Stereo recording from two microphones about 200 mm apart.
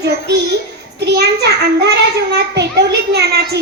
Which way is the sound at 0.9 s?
55° right (ahead or behind).